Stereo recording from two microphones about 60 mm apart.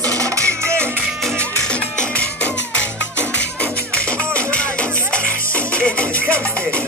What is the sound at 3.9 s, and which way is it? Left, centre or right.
Music, left.